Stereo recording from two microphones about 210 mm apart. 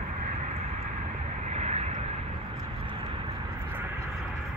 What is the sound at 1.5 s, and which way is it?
Vehicle, 30° right (ahead or behind).